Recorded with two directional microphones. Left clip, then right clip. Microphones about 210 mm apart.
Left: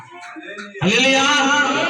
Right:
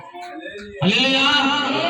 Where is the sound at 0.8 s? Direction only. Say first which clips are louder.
Left 2 dB; 10° left (ahead or behind).